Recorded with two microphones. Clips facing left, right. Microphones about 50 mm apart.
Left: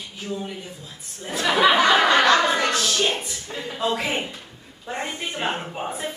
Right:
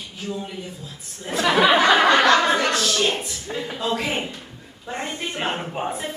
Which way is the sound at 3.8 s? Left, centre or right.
Centre.